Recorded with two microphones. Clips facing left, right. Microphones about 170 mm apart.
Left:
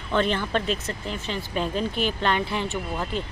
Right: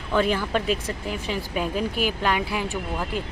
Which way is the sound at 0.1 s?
5° right (ahead or behind).